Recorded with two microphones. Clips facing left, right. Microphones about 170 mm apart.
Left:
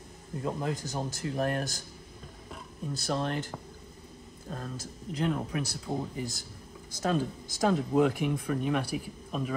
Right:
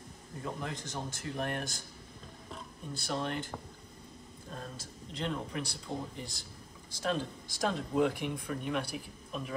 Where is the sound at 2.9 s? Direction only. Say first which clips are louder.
Left 4 dB; 40° left (ahead or behind).